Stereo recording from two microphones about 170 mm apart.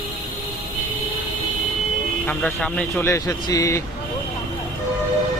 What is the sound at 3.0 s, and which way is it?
Speech, 20° left (ahead or behind).